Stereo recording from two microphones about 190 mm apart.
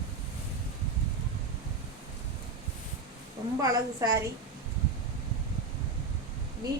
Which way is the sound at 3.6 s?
20° right (ahead or behind).